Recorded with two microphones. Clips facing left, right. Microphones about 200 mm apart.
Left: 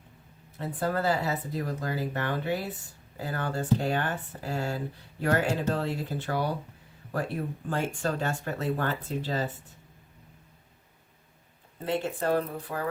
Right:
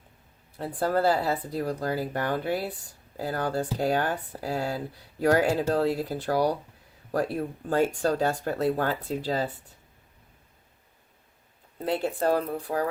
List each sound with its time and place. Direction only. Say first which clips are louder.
0.9 s speech: right 4 dB; 35° right (ahead or behind)
11.9 s speech: right 2 dB; 40° right (ahead or behind)